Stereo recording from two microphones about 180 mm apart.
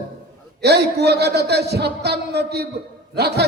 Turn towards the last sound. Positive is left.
turn(degrees=-65)  # may be behind; listen again after turning